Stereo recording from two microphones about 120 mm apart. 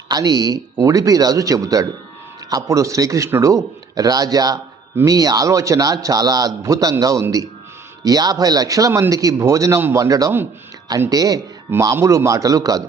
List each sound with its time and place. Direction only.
0.1 s a man's voice: 30° right (ahead or behind)